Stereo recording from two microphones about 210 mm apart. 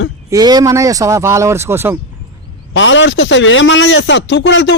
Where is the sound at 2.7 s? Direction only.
60° left (ahead or behind).